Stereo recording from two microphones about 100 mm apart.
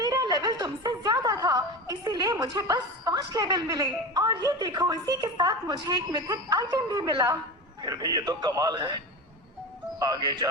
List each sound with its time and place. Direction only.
0.0 s a woman's voice: 40° right (ahead or behind)
10.0 s a man's voice: 40° right (ahead or behind)